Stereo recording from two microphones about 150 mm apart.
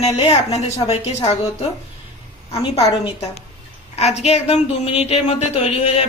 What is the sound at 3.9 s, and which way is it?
A woman's voice, 45° left (ahead or behind).